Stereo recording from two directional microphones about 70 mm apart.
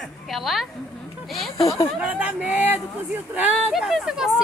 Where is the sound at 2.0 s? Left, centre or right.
Centre.